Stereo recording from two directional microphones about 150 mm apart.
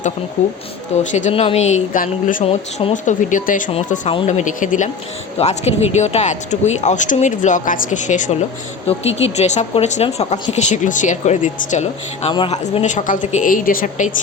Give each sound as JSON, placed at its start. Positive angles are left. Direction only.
{"t": 0.9, "sound": "speech", "side_deg": 55}
{"t": 1.3, "sound": "speech", "side_deg": 40}
{"t": 2.4, "sound": "speech", "side_deg": 45}
{"t": 5.4, "sound": "speech", "side_deg": 45}
{"t": 8.9, "sound": "speech", "side_deg": 45}
{"t": 12.3, "sound": "speech", "side_deg": 35}
{"t": 12.8, "sound": "speech", "side_deg": 55}